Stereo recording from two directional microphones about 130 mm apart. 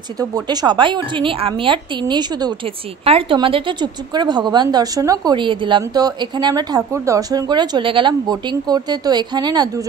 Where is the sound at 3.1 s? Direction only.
45° right (ahead or behind).